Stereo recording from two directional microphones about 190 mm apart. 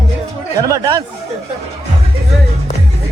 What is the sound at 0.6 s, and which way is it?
Speech, 15° right (ahead or behind).